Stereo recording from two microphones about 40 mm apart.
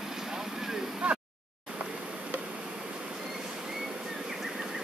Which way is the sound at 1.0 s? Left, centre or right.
Right.